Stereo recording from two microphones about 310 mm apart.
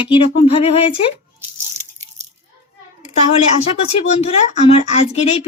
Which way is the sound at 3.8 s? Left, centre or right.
Left.